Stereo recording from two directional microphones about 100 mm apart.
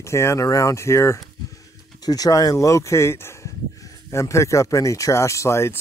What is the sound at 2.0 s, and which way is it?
Speech, 40° left (ahead or behind).